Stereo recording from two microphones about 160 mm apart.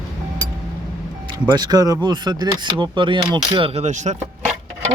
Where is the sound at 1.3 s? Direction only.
25° right (ahead or behind).